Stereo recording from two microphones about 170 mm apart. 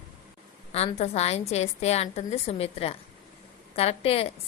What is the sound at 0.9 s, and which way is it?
A woman's voice, 40° left (ahead or behind).